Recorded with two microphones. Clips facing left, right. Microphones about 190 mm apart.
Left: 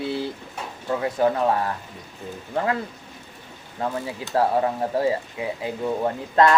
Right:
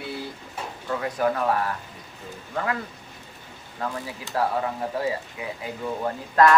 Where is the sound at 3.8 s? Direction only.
25° left (ahead or behind).